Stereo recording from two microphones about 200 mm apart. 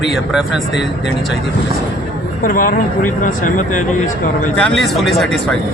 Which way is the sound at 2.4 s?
45° left (ahead or behind).